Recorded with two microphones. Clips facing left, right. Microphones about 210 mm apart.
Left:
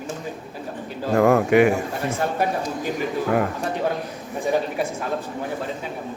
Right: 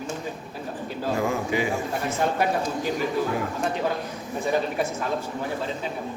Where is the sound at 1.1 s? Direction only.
60° left (ahead or behind).